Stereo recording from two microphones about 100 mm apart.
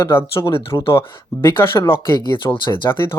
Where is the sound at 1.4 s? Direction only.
25° left (ahead or behind).